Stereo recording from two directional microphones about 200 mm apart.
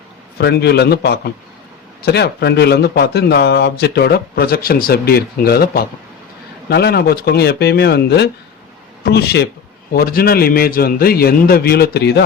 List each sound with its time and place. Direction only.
0.3 s speech: 55° left (ahead or behind)